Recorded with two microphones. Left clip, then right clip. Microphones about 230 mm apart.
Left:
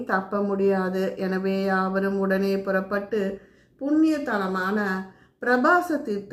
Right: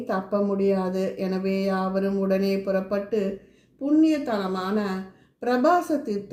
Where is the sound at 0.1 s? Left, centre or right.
Centre.